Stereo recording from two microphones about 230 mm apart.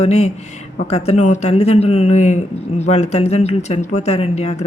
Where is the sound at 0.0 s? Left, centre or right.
Left.